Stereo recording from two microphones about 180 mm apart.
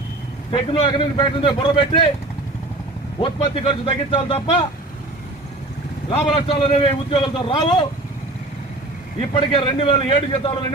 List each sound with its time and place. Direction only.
0.5 s a man's voice: 25° left (ahead or behind)
3.2 s a man's voice: 30° left (ahead or behind)
6.3 s a man's voice: 30° left (ahead or behind)
9.4 s a man's voice: 30° left (ahead or behind)